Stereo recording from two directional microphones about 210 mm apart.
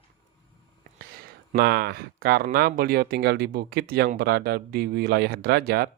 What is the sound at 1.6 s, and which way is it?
Speech, 50° right (ahead or behind).